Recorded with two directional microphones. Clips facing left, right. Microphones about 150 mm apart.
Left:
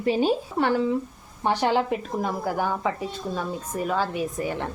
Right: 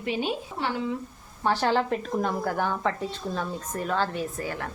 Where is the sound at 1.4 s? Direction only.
15° left (ahead or behind).